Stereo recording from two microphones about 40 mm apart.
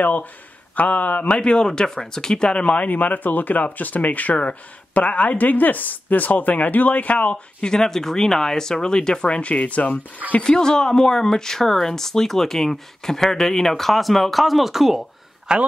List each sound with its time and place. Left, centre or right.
0.0 s speech: left
1.4 s speech: left
2.6 s speech: left
7.6 s speech: centre; by 9.9 s left
10.4 s speech: centre
15.5 s speech: right